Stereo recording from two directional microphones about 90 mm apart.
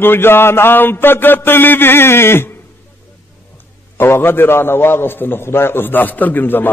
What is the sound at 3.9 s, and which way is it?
Mantra, 25° left (ahead or behind).